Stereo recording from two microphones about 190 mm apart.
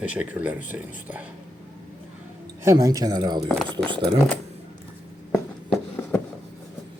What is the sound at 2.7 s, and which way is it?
Speech, 20° right (ahead or behind).